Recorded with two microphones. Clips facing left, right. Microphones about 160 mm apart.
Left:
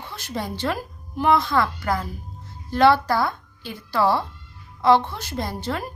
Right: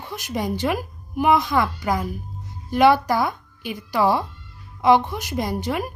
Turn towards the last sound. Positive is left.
turn(degrees=-15)  # may be behind; listen again after turning